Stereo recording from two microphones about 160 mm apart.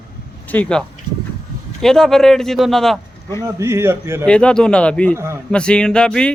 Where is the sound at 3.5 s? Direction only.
15° right (ahead or behind).